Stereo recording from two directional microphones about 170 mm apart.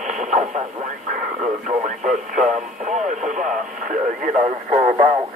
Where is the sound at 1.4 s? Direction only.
45° right (ahead or behind).